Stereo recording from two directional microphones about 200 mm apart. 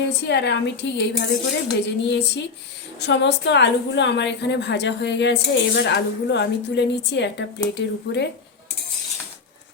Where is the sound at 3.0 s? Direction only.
60° left (ahead or behind).